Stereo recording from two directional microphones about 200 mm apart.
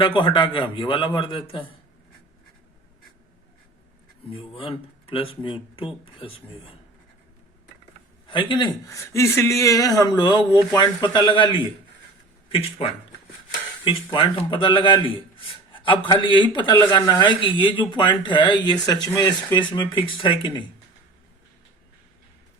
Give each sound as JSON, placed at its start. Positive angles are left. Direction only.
{"t": 0.0, "sound": "speech", "side_deg": 25}
{"t": 4.3, "sound": "speech", "side_deg": 25}
{"t": 8.3, "sound": "speech", "side_deg": 25}
{"t": 13.8, "sound": "speech", "side_deg": 25}
{"t": 15.7, "sound": "a sound", "side_deg": 25}
{"t": 16.2, "sound": "speech", "side_deg": 25}